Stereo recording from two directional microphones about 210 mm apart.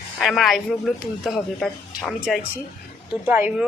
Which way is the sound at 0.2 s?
Centre (ahead or behind).